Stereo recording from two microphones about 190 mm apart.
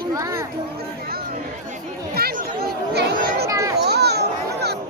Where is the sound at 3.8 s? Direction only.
60° right (ahead or behind).